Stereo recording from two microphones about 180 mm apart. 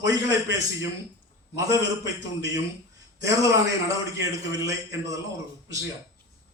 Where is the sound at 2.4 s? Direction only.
20° right (ahead or behind).